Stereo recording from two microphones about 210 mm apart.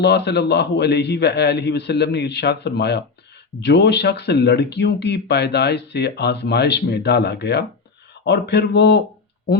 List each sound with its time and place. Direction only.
0.0 s speech: 50° left (ahead or behind)